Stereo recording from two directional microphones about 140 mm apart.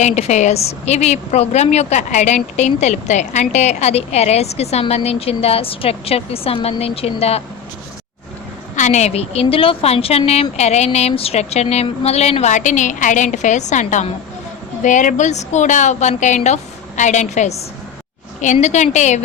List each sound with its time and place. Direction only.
0.0 s a woman's voice: 55° left (ahead or behind)
8.7 s a woman's voice: 60° left (ahead or behind)